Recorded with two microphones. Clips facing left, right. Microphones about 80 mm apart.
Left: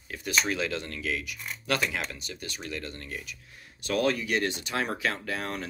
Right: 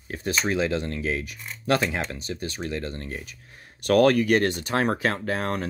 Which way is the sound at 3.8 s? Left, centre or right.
Right.